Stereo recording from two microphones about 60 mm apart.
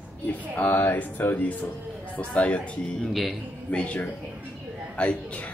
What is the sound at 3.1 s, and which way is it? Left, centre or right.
Speech, centre.